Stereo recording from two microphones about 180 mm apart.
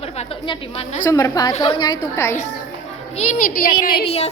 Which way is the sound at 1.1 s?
20° left (ahead or behind).